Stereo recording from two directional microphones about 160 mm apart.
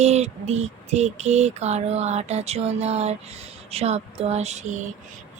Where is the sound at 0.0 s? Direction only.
45° right (ahead or behind).